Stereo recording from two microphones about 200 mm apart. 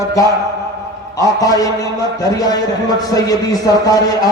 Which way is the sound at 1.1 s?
15° left (ahead or behind).